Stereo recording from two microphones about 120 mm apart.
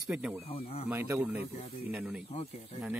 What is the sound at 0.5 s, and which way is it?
Speech, 55° left (ahead or behind).